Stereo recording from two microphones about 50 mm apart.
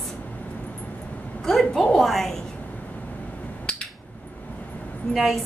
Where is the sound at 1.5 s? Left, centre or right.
Centre.